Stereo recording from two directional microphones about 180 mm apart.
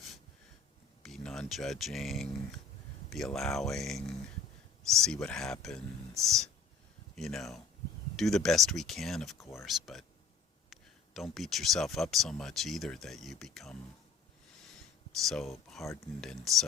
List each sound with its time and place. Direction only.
1.0 s speech: centre (ahead or behind)
9.4 s speech: 15° left (ahead or behind)
9.6 s speech: centre (ahead or behind)
15.2 s speech: centre (ahead or behind)